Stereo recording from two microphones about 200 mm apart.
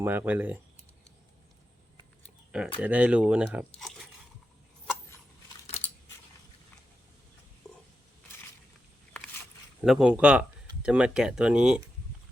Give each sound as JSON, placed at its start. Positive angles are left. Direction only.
{"t": 0.0, "sound": "speech", "side_deg": -10}
{"t": 2.8, "sound": "speech", "side_deg": -5}
{"t": 5.6, "sound": "a sound", "side_deg": 30}
{"t": 9.8, "sound": "speech", "side_deg": -5}